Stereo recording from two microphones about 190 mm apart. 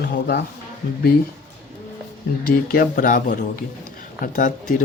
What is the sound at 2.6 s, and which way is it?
Speech, 50° left (ahead or behind).